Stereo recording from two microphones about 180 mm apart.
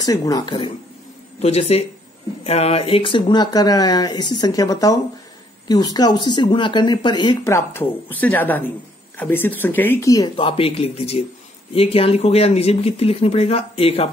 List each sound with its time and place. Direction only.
0.0 s speech: 20° left (ahead or behind)
1.4 s speech: 35° left (ahead or behind)